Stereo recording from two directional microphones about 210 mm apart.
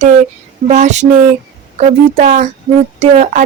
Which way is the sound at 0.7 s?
35° right (ahead or behind).